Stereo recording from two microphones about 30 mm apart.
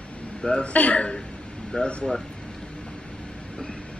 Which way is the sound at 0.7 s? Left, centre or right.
Left.